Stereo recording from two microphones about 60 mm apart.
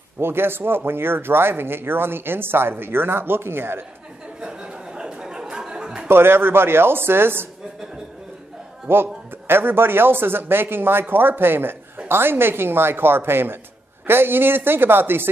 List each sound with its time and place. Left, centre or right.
0.2 s speech: right
4.4 s a sound: centre
6.0 s speech: right
8.8 s speech: right